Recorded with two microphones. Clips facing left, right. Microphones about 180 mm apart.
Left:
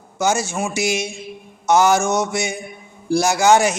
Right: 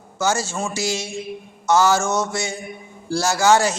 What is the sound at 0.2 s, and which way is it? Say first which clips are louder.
Mantra: left 2 dB; 15° left (ahead or behind).